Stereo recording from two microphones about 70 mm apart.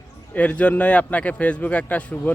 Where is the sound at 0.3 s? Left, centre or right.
Centre.